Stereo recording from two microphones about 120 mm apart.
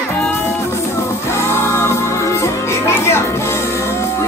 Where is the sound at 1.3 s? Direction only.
20° left (ahead or behind).